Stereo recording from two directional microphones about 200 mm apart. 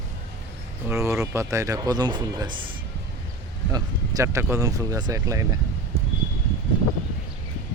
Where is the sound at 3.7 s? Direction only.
15° right (ahead or behind).